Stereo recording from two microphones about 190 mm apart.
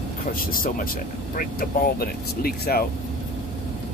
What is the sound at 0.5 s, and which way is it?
Speech, 50° left (ahead or behind).